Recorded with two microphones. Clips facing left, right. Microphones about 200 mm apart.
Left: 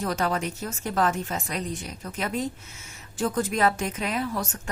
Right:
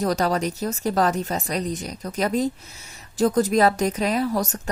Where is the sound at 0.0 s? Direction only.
40° right (ahead or behind).